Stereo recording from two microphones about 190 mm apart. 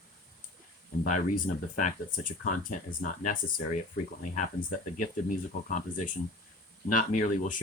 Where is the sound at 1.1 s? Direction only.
40° left (ahead or behind).